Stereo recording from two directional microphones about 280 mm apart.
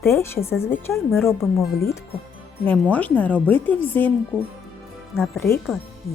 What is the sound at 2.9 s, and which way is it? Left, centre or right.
Speech, centre.